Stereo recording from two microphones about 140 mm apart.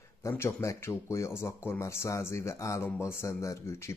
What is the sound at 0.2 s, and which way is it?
Speech, 20° left (ahead or behind).